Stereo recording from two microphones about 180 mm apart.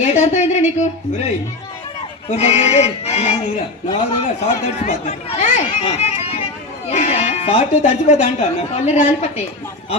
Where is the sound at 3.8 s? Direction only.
25° left (ahead or behind).